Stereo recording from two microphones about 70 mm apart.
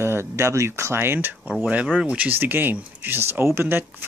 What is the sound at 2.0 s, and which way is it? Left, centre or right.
Speech, right.